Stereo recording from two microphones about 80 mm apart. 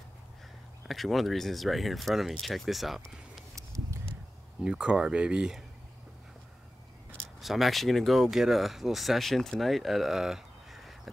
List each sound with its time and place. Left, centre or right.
0.8 s speech: centre
3.5 s a sound: right
4.6 s speech: centre
7.2 s speech: centre